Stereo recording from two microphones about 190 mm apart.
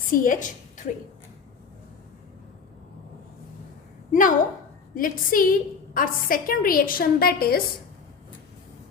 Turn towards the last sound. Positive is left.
turn(degrees=50)  # may be behind; listen again after turning